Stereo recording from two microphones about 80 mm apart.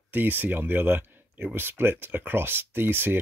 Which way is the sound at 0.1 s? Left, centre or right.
Right.